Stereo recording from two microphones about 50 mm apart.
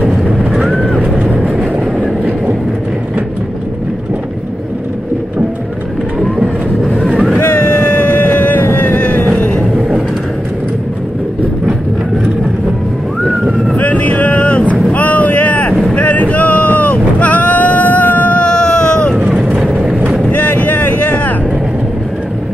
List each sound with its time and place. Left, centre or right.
0.7 s vehicle: centre
1.0 s vehicle: right
1.3 s vehicle: centre
6.1 s vehicle: centre
7.4 s vehicle: left
8.6 s a sound: left
9.3 s vehicle: left
13.7 s vehicle: left
14.9 s boat: left
18.5 s baby cry: centre
19.1 s vehicle: centre
20.2 s vehicle: left